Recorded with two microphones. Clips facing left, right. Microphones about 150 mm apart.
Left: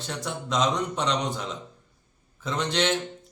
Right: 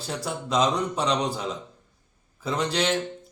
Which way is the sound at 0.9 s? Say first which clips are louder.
Right 2 dB; 35° right (ahead or behind).